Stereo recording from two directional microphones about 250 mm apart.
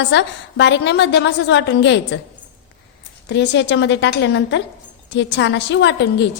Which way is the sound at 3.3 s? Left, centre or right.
Left.